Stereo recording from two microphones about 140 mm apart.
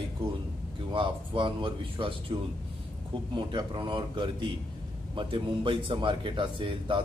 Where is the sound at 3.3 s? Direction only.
35° right (ahead or behind).